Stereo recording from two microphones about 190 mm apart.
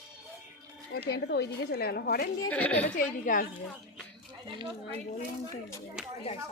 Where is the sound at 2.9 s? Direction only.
45° left (ahead or behind).